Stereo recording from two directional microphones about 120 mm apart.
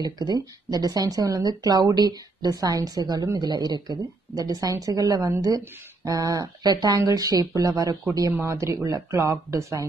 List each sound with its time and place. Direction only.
0.0 s speech: 35° right (ahead or behind)